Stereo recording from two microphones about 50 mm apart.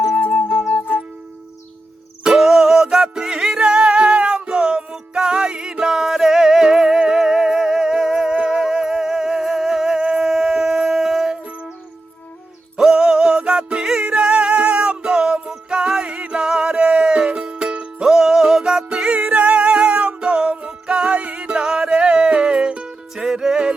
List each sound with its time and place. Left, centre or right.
0.2 s music: left
2.2 s music: centre
12.7 s music: centre